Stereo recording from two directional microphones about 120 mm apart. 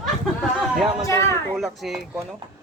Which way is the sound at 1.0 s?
25° left (ahead or behind).